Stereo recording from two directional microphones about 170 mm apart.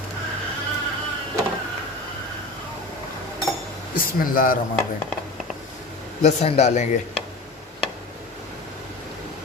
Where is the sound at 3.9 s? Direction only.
55° left (ahead or behind).